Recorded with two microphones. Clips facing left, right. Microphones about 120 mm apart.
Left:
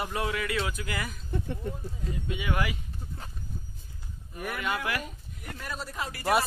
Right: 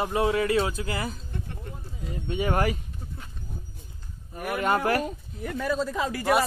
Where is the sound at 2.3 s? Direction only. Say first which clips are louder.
Right 7 dB; 40° right (ahead or behind).